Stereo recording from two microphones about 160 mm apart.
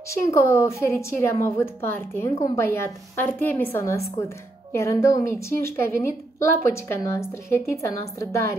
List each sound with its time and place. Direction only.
0.1 s a woman's voice: 15° left (ahead or behind)